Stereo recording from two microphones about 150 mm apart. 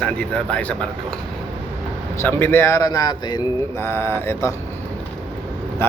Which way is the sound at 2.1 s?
15° left (ahead or behind).